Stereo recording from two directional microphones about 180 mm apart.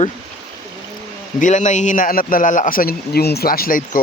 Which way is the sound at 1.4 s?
45° left (ahead or behind).